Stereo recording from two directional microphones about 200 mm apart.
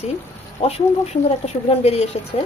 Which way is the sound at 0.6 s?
30° left (ahead or behind).